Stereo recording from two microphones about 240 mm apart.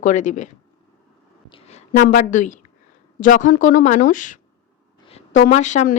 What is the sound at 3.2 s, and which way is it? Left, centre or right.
A woman's voice, left.